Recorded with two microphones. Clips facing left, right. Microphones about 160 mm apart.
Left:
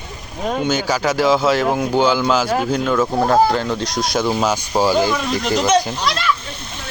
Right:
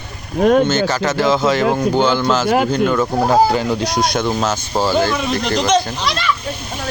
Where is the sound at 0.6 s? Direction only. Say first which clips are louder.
Right 2 dB; 10° left (ahead or behind).